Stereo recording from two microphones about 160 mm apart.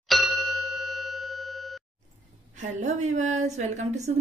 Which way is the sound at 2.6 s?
50° right (ahead or behind).